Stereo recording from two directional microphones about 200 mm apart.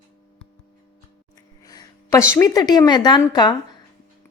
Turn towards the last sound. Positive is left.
turn(degrees=20)  # may be behind; listen again after turning